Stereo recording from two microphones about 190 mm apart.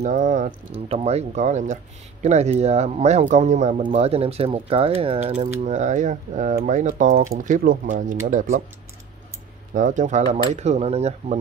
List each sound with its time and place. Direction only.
0.0 s speech: 40° right (ahead or behind)
9.8 s speech: 40° right (ahead or behind)